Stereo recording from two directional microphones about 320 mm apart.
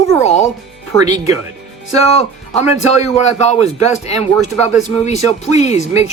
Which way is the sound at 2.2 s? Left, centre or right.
Left.